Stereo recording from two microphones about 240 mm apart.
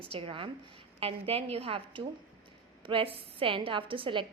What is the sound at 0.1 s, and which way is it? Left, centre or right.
A woman's voice, right.